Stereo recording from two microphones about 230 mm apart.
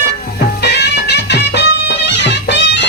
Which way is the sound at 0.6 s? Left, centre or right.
Left.